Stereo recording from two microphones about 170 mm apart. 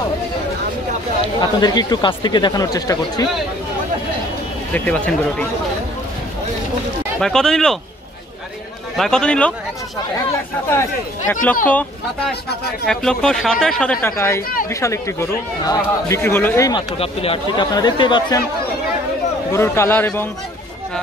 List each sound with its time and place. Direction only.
1.4 s speech: 25° left (ahead or behind)
4.7 s speech: 10° left (ahead or behind)
7.2 s speech: 5° left (ahead or behind)
8.9 s speech: 5° left (ahead or behind)
10.7 s speech: 15° left (ahead or behind)
12.8 s speech: 5° left (ahead or behind); by 16.8 s 20° left (ahead or behind)
17.0 s speech: 35° left (ahead or behind)
19.5 s speech: 15° left (ahead or behind)